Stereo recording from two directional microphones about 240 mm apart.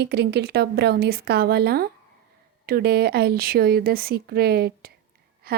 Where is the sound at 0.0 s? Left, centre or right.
Right.